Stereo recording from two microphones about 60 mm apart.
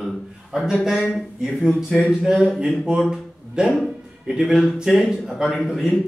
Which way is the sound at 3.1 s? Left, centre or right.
Centre.